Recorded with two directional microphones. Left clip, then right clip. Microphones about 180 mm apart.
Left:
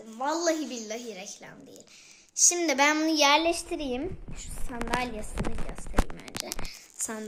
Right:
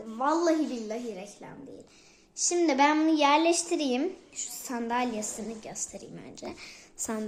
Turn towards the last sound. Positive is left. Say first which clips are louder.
# right 2 dB
turn(degrees=0)  # may be behind; listen again after turning